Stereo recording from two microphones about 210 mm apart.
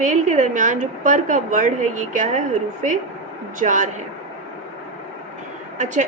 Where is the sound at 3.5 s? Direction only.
35° right (ahead or behind).